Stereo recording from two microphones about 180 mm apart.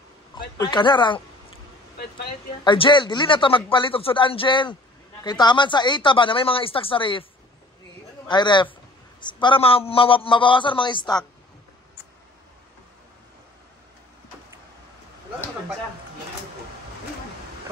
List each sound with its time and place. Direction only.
0.3 s a man's voice: 25° left (ahead or behind)
2.6 s speech: 25° left (ahead or behind)
8.3 s speech: 25° left (ahead or behind)